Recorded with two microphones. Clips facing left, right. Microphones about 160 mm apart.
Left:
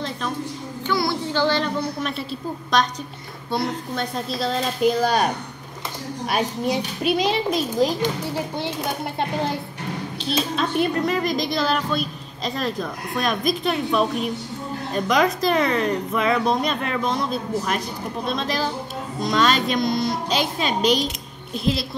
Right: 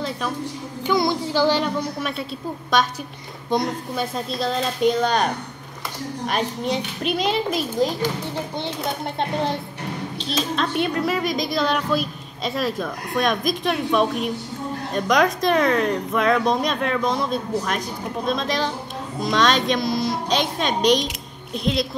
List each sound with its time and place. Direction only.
0.8 s a child's voice: 15° right (ahead or behind)
3.4 s a child's voice: 15° right (ahead or behind)
4.0 s a woman's voice: centre (ahead or behind)
10.5 s a woman's voice: 5° left (ahead or behind)